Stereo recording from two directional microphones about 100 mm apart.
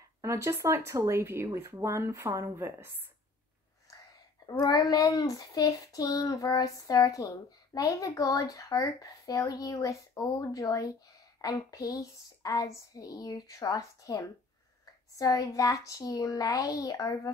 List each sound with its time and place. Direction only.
0.2 s speech: 30° right (ahead or behind)
4.5 s speech: 40° left (ahead or behind)